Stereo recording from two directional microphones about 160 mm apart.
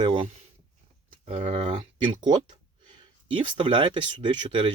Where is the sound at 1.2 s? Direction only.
40° right (ahead or behind).